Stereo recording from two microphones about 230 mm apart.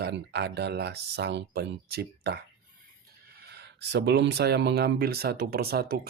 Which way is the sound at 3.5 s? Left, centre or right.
Right.